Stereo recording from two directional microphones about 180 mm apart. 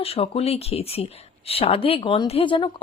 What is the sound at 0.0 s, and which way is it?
Speech, 35° left (ahead or behind).